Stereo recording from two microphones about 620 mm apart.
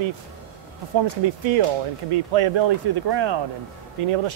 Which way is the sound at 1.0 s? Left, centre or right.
Right.